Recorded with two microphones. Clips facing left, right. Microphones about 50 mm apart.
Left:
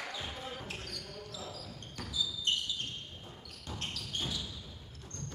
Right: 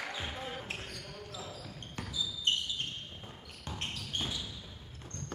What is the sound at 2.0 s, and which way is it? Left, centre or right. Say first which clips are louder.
Basketball bounce: right 2 dB; right.